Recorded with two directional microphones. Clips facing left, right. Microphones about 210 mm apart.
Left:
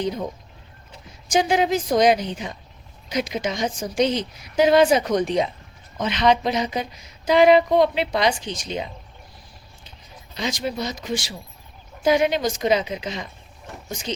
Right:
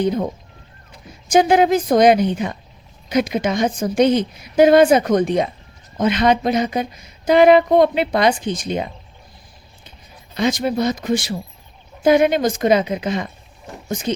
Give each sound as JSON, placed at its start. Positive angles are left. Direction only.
{"t": 0.0, "sound": "a woman's voice", "side_deg": -55}
{"t": 1.3, "sound": "a woman's voice", "side_deg": -55}
{"t": 10.3, "sound": "a woman's voice", "side_deg": -55}